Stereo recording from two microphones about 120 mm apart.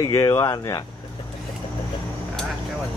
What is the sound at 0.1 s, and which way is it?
Speech, 25° left (ahead or behind).